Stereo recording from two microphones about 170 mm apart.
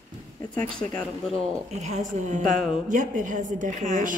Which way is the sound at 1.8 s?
45° right (ahead or behind).